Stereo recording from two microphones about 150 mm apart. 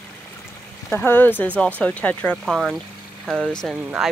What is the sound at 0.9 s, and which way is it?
Speech, 10° left (ahead or behind).